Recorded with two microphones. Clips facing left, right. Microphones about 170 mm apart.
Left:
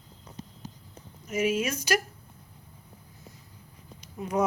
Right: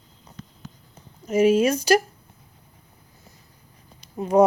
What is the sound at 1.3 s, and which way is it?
Speech, 35° right (ahead or behind).